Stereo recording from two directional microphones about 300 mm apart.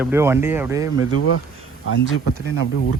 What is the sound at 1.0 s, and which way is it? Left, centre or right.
Speech, left.